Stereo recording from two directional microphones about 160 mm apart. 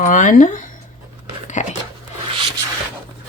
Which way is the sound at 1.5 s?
50° left (ahead or behind).